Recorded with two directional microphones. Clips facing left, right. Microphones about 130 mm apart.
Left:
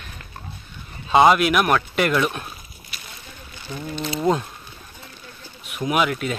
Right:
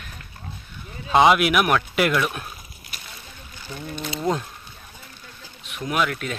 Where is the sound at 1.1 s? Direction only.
Centre (ahead or behind).